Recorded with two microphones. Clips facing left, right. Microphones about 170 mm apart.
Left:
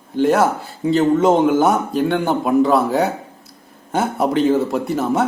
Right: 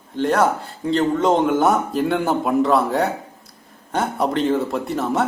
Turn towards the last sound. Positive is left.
turn(degrees=0)  # may be behind; listen again after turning